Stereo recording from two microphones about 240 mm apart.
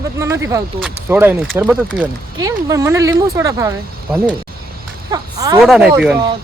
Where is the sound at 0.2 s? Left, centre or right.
Centre.